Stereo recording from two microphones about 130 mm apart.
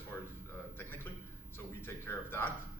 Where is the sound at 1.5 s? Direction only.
15° left (ahead or behind).